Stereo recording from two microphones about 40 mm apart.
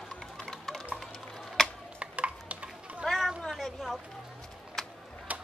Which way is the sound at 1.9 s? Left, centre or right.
Right.